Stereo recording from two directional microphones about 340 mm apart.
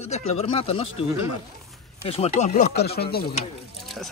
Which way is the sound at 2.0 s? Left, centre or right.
Centre.